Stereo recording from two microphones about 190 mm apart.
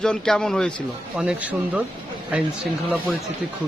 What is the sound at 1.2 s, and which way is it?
Speech, 5° right (ahead or behind).